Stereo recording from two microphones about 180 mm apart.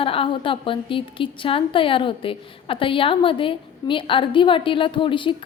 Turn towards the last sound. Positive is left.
turn(degrees=30)  # may be behind; listen again after turning